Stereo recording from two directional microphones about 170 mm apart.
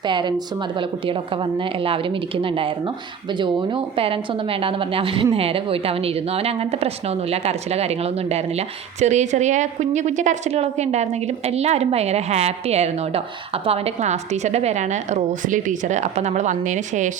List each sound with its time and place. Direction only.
0.0 s speech: 25° right (ahead or behind); by 17.1 s 45° right (ahead or behind)